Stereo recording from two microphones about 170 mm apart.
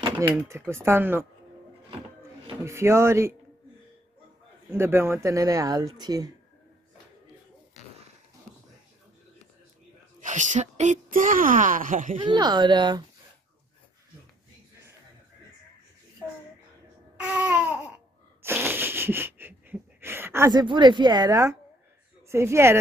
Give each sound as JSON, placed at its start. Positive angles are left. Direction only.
{"t": 0.4, "sound": "speech", "side_deg": -15}
{"t": 2.6, "sound": "speech", "side_deg": -15}
{"t": 4.6, "sound": "speech", "side_deg": -15}
{"t": 10.2, "sound": "speech", "side_deg": -45}
{"t": 12.2, "sound": "speech", "side_deg": -25}
{"t": 17.2, "sound": "baby cry", "side_deg": -10}
{"t": 18.4, "sound": "wheeze", "side_deg": -10}
{"t": 20.5, "sound": "speech", "side_deg": -25}